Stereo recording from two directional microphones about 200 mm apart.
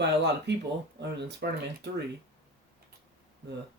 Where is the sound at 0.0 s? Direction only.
60° right (ahead or behind).